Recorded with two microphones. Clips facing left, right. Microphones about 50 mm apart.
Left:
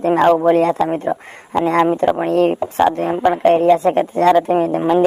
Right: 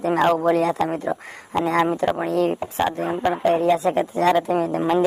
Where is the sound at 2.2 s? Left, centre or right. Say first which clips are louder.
Left 6 dB; left.